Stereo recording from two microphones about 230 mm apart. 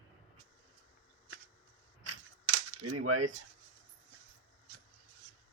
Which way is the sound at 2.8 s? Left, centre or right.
Right.